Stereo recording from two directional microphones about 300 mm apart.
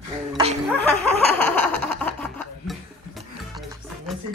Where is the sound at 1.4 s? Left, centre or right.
Centre.